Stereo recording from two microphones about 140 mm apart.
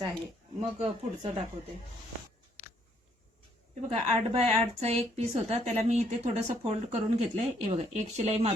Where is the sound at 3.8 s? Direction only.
45° right (ahead or behind).